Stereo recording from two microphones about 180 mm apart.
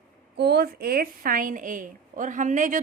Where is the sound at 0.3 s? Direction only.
65° right (ahead or behind).